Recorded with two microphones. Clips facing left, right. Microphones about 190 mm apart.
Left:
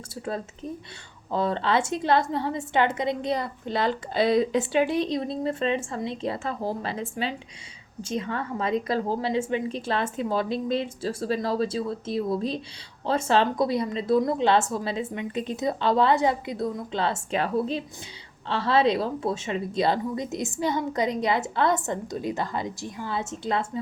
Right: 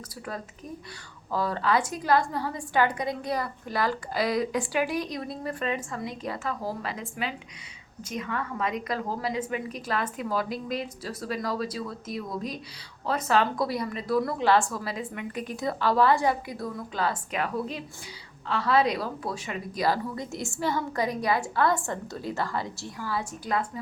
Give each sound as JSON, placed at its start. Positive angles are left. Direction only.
{"t": 1.3, "sound": "a woman's voice", "side_deg": 25}